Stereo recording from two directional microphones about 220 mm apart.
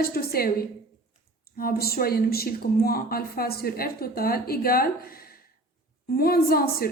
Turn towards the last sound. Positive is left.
turn(degrees=40)  # may be behind; listen again after turning